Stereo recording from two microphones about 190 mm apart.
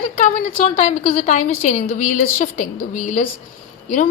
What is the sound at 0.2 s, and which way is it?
A woman's voice, 45° left (ahead or behind).